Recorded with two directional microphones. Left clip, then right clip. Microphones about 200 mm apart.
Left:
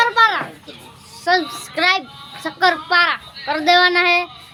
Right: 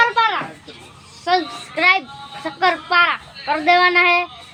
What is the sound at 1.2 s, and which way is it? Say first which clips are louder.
Child singing: left 1 dB; 20° left (ahead or behind).